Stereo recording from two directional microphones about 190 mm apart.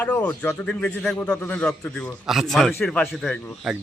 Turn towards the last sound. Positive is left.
turn(degrees=5)  # may be behind; listen again after turning